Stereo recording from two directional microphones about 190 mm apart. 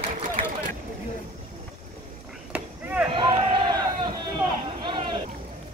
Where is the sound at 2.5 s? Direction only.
5° right (ahead or behind).